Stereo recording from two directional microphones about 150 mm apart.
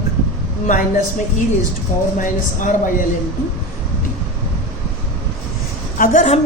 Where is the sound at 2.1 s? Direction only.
60° left (ahead or behind).